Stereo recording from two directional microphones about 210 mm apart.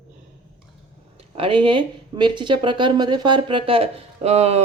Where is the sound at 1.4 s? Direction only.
25° right (ahead or behind).